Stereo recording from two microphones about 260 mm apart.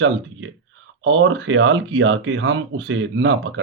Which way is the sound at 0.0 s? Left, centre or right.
Right.